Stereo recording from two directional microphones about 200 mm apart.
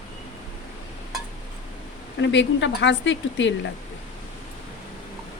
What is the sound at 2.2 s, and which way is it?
Speech, 65° left (ahead or behind).